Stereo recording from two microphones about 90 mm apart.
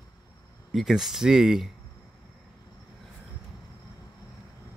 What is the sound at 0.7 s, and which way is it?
Speech, 5° right (ahead or behind).